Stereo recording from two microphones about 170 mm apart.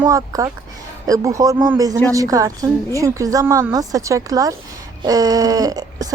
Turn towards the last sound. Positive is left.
turn(degrees=-20)  # may be behind; listen again after turning